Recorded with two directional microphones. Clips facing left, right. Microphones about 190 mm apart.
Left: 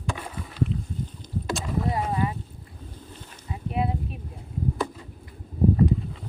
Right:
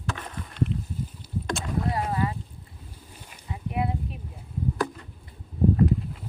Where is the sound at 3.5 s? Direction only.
25° left (ahead or behind).